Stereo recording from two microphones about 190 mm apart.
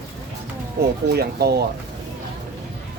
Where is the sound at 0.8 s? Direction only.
55° right (ahead or behind).